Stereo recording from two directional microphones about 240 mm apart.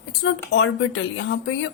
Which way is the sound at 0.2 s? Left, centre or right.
Left.